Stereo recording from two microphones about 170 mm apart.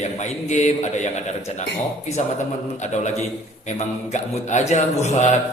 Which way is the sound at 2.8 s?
45° left (ahead or behind).